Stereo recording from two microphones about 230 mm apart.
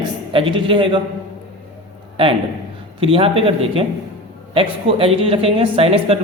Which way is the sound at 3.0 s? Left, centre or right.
Right.